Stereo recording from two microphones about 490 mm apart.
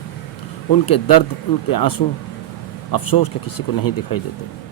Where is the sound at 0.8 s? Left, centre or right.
Left.